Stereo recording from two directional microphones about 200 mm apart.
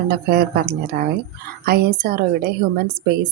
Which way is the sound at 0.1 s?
50° right (ahead or behind).